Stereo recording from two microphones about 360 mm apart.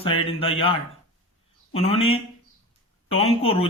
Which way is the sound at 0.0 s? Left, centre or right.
Centre.